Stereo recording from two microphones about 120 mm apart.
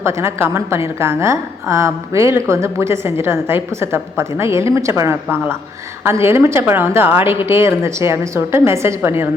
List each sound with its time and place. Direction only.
0.0 s a woman's voice: 25° right (ahead or behind)